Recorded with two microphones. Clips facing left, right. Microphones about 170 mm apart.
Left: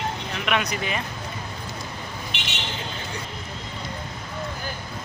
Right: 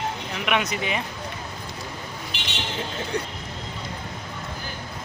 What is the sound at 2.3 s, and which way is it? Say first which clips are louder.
Vehicle: left 1 dB; 35° right (ahead or behind).